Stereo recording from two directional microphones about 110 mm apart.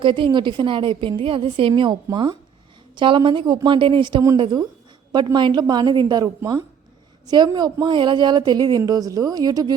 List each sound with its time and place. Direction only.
0.0 s a woman's voice: 50° right (ahead or behind)